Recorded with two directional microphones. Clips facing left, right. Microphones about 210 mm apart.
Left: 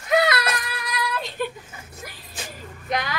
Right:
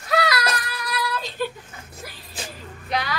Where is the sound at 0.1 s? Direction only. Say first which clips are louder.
Left 2 dB; 20° left (ahead or behind).